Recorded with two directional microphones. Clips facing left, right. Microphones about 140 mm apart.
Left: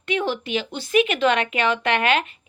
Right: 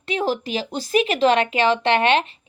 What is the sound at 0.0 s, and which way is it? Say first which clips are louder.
Speech: right 1 dB; 35° right (ahead or behind).